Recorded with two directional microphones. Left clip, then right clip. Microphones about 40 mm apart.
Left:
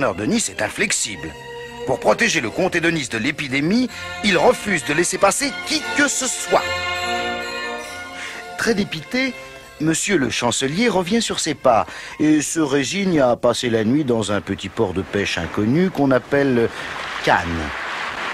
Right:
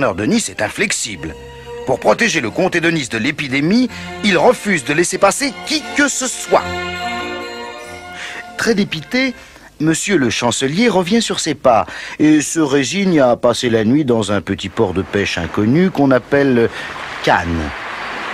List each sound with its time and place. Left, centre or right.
0.2 s speech: left
8.5 s speech: left